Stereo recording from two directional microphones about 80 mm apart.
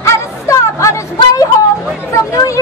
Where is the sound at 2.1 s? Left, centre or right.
Left.